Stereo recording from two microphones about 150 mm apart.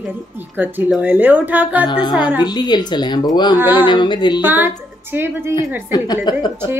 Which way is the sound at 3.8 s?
30° left (ahead or behind).